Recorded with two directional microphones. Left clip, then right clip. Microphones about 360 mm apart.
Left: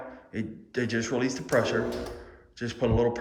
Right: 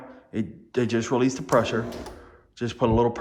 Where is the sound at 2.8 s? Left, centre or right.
Centre.